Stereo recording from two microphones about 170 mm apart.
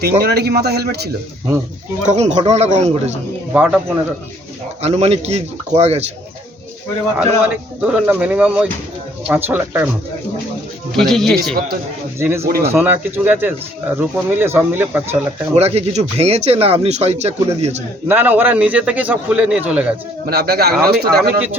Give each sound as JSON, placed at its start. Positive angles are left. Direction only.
{"t": 0.0, "sound": "a man's voice", "side_deg": -70}
{"t": 2.0, "sound": "speech", "side_deg": -40}
{"t": 3.5, "sound": "a man's voice", "side_deg": -10}
{"t": 4.8, "sound": "speech", "side_deg": -40}
{"t": 7.2, "sound": "a man's voice", "side_deg": -10}
{"t": 10.9, "sound": "speech", "side_deg": 0}
{"t": 12.2, "sound": "a man's voice", "side_deg": -15}
{"t": 15.5, "sound": "speech", "side_deg": -40}
{"t": 18.1, "sound": "a man's voice", "side_deg": -10}
{"t": 20.2, "sound": "a man's voice", "side_deg": -65}